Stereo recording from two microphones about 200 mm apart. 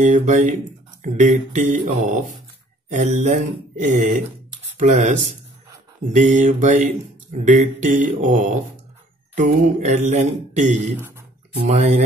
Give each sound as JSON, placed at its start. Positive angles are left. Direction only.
{"t": 0.0, "sound": "mantra", "side_deg": -35}
{"t": 11.0, "sound": "a sound", "side_deg": -10}
{"t": 11.6, "sound": "mantra", "side_deg": -35}